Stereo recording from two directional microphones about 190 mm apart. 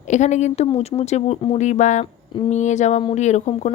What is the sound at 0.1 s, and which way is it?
Speech, 40° left (ahead or behind).